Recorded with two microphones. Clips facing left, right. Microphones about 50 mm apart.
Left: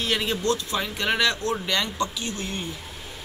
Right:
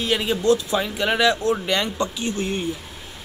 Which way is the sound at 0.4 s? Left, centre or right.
Centre.